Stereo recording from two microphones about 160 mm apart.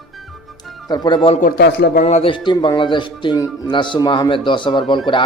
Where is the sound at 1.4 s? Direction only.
90° left.